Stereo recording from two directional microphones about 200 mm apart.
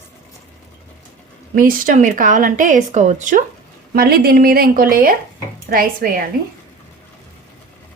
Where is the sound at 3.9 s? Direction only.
50° right (ahead or behind).